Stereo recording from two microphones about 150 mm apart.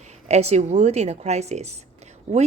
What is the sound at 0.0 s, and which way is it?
Speech, 50° right (ahead or behind).